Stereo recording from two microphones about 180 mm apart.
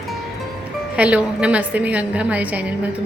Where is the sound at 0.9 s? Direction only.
5° right (ahead or behind).